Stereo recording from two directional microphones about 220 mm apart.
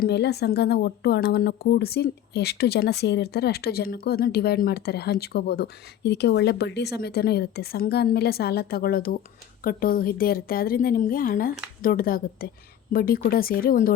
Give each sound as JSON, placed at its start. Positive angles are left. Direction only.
{"t": 0.0, "sound": "a woman's voice", "side_deg": 50}